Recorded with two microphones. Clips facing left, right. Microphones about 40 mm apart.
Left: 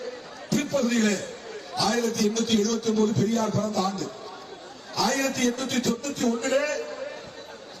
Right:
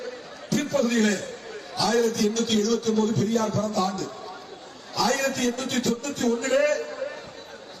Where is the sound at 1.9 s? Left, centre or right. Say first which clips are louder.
Right 4 dB; right.